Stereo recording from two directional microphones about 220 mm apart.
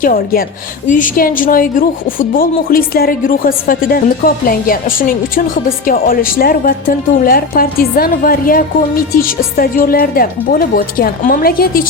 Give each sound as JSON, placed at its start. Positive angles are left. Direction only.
{"t": 0.0, "sound": "a woman's voice", "side_deg": 40}